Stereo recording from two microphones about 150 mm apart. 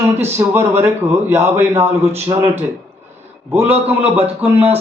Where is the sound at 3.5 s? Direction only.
15° right (ahead or behind).